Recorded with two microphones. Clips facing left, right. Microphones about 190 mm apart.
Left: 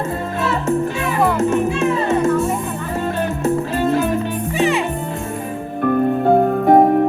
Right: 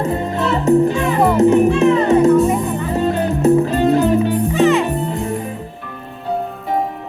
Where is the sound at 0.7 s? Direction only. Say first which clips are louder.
Right 9 dB; 20° right (ahead or behind).